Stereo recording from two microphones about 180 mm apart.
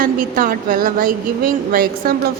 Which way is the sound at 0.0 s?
50° right (ahead or behind).